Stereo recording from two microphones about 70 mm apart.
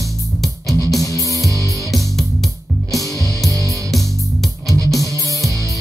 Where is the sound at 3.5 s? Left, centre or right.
Right.